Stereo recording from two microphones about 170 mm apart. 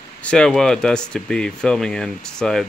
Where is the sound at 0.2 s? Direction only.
5° left (ahead or behind).